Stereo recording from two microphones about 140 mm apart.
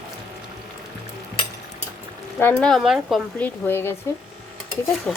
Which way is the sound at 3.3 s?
15° left (ahead or behind).